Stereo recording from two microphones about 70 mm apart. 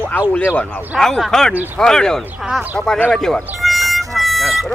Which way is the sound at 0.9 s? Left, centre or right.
Centre.